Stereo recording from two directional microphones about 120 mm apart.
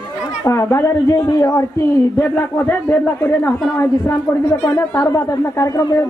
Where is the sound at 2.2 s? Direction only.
15° left (ahead or behind).